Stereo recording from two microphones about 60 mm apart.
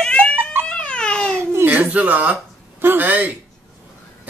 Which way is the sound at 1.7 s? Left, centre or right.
Right.